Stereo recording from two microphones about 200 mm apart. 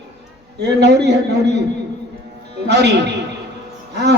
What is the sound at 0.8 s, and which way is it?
Speech, 55° right (ahead or behind).